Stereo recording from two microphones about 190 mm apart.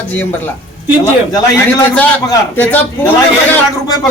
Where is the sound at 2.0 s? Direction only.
10° left (ahead or behind).